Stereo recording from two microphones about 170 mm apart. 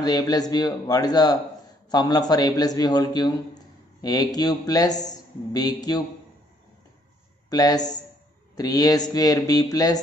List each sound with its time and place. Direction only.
0.0 s a man's voice: 20° left (ahead or behind)
7.4 s a man's voice: 20° left (ahead or behind)